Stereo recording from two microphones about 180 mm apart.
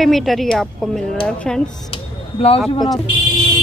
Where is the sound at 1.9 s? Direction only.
30° left (ahead or behind).